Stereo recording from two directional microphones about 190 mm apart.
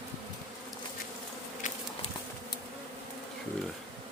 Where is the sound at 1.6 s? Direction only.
40° left (ahead or behind).